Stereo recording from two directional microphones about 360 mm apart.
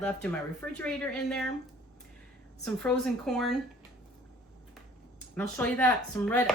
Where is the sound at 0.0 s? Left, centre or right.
Centre.